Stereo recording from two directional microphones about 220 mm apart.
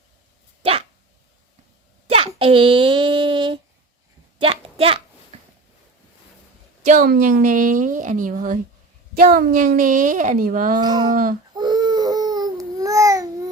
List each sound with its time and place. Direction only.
0.6 s dog: 25° right (ahead or behind)
2.0 s child singing: 25° right (ahead or behind)
4.4 s a sound: 25° right (ahead or behind)
6.8 s a woman's voice: 40° right (ahead or behind)
10.8 s speech: 20° right (ahead or behind)
11.1 s a woman's voice: 40° right (ahead or behind)
11.5 s babbling: 20° right (ahead or behind)